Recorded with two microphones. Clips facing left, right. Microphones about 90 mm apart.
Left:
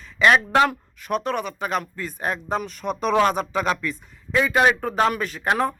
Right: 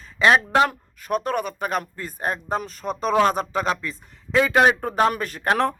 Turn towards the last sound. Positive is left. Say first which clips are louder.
# even
turn(degrees=-50)  # may be behind; listen again after turning